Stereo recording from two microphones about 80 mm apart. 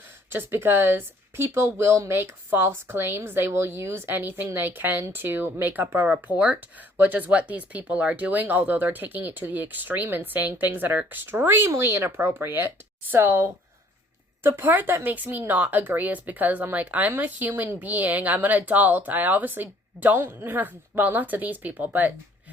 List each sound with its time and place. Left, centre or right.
0.3 s speech: right